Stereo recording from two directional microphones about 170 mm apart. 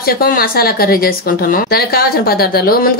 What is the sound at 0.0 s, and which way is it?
Speech, 60° left (ahead or behind).